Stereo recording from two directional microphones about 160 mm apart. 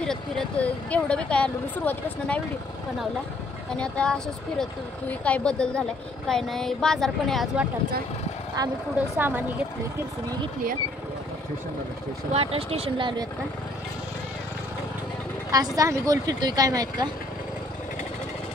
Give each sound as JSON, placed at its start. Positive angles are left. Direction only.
{"t": 0.0, "sound": "speech", "side_deg": 5}
{"t": 3.7, "sound": "a woman's voice", "side_deg": 5}
{"t": 8.6, "sound": "speech", "side_deg": -25}
{"t": 9.1, "sound": "a woman's voice", "side_deg": -10}
{"t": 12.3, "sound": "speech", "side_deg": -40}
{"t": 15.5, "sound": "speech", "side_deg": -20}